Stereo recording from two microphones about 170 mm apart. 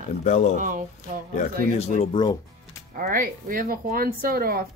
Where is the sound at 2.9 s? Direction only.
55° right (ahead or behind).